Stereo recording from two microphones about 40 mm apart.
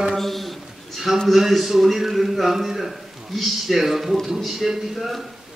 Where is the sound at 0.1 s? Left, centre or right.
Centre.